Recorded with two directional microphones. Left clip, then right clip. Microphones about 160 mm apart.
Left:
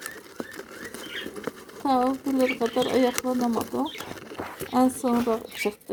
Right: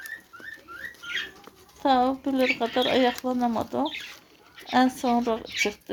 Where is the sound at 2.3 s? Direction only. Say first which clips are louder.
Left 1 dB; 5° left (ahead or behind).